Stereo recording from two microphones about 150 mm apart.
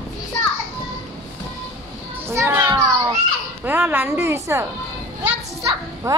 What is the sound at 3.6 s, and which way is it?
A woman's voice, 15° right (ahead or behind).